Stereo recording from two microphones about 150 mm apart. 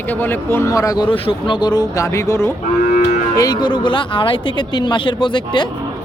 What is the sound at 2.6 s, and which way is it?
Moo, 55° left (ahead or behind).